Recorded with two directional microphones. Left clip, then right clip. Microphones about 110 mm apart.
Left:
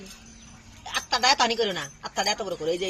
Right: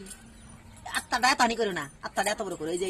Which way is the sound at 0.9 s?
45° right (ahead or behind).